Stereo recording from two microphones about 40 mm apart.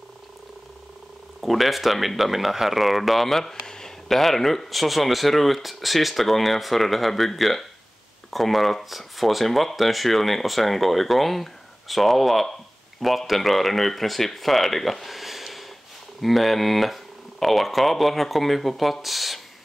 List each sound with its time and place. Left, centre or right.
1.4 s speech: centre
3.6 s a sound: centre
4.1 s speech: centre